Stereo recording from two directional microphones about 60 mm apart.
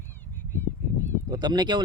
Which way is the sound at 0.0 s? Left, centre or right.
Left.